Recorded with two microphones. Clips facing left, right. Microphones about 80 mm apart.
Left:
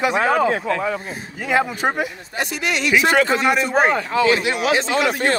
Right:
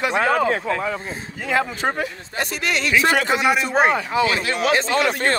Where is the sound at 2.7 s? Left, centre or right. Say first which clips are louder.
Left 2 dB; right.